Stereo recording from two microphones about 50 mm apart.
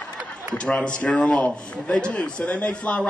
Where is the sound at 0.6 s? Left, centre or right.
Centre.